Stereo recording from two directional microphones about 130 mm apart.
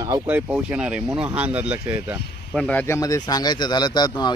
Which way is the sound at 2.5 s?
10° left (ahead or behind).